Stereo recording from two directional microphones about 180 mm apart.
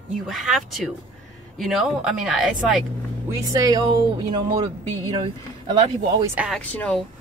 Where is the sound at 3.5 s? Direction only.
20° right (ahead or behind).